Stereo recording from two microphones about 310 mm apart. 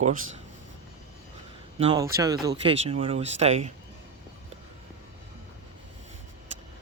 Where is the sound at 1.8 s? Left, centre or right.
Centre.